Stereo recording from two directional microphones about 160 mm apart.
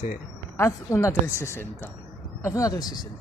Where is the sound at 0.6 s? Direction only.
15° left (ahead or behind).